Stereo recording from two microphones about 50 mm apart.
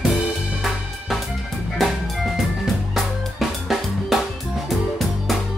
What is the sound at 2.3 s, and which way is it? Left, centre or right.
Music, centre.